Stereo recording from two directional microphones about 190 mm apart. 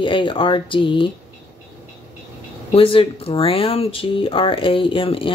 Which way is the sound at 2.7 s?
30° left (ahead or behind).